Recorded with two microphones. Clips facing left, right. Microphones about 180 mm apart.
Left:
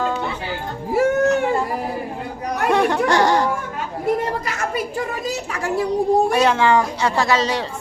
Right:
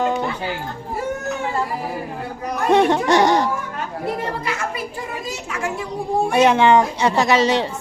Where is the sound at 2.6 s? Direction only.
20° right (ahead or behind).